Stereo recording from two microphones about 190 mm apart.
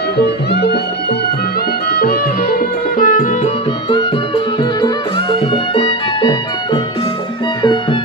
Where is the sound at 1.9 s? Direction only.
50° left (ahead or behind).